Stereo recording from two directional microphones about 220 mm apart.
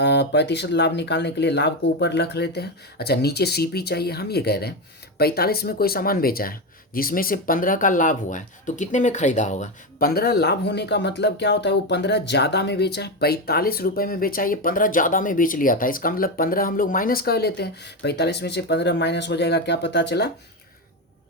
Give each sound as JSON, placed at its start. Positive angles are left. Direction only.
{"t": 0.0, "sound": "speech", "side_deg": 50}